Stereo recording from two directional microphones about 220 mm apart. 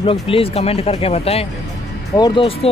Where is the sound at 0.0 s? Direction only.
25° left (ahead or behind).